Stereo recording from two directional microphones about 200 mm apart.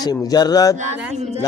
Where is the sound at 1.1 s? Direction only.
30° right (ahead or behind).